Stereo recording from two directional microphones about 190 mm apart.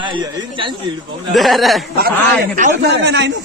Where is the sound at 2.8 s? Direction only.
65° right (ahead or behind).